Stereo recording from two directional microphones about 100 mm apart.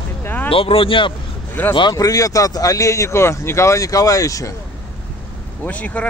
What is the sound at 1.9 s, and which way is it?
Speech, 35° left (ahead or behind).